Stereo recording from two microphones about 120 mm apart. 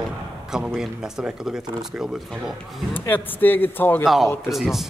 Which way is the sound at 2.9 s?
15° left (ahead or behind).